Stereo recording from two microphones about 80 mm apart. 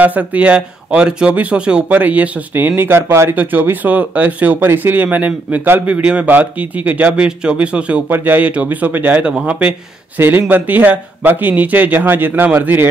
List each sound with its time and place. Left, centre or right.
0.0 s speech: right